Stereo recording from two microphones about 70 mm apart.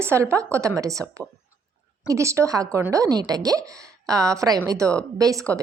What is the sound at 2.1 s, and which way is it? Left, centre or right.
Speech, right.